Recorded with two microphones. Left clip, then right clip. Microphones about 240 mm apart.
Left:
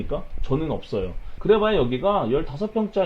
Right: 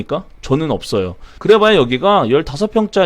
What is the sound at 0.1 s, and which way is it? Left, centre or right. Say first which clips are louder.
Speech: right 9 dB; right.